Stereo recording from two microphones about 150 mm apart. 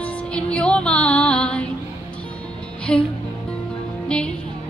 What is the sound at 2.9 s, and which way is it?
Speech, 5° left (ahead or behind).